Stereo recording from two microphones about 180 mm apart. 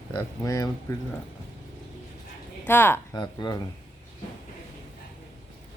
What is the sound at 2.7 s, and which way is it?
Speech, 10° left (ahead or behind).